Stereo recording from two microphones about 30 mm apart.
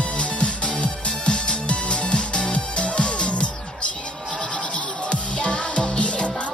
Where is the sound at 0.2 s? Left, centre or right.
Left.